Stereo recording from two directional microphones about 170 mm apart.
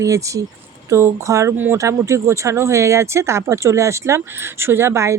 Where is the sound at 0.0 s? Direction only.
20° right (ahead or behind).